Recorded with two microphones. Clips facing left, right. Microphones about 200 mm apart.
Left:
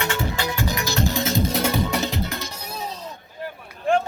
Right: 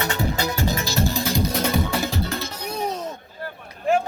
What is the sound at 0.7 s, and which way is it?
Music, 20° left (ahead or behind).